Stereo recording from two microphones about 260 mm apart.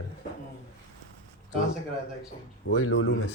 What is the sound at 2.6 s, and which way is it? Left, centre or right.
Speech, left.